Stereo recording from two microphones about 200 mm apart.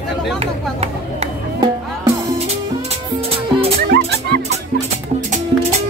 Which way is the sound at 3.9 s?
55° right (ahead or behind).